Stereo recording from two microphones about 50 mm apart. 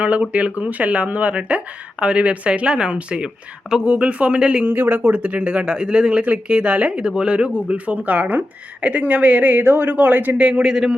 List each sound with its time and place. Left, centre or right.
0.0 s speech: right
4.6 s a woman's voice: right
9.9 s a woman's voice: right
10.4 s speech: centre